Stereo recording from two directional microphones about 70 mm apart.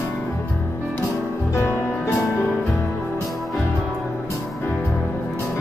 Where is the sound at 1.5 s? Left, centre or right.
Left.